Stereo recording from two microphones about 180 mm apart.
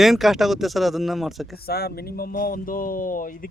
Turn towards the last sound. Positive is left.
turn(degrees=50)  # may be behind; listen again after turning